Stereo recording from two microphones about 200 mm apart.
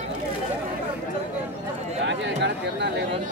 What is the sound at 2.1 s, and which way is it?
Speech, 60° right (ahead or behind).